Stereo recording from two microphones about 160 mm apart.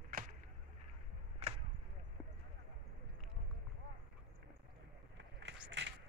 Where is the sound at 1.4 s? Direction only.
40° right (ahead or behind).